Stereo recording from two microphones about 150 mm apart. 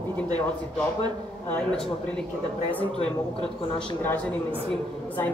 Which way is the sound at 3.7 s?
10° left (ahead or behind).